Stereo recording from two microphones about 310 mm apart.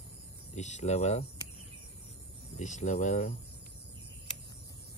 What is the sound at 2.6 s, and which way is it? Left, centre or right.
Speech, left.